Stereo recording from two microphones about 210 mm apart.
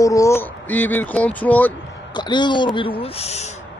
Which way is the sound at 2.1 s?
20° left (ahead or behind).